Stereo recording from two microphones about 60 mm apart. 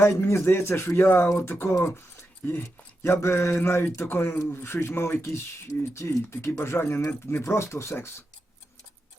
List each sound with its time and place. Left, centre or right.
0.0 s speech: left
2.6 s speech: left